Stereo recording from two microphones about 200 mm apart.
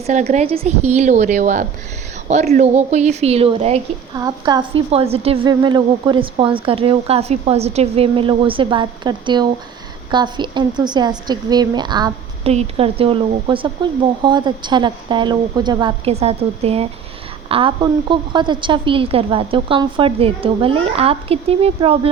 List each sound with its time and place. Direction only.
0.1 s a woman's voice: 35° right (ahead or behind)
4.1 s a woman's voice: 20° right (ahead or behind)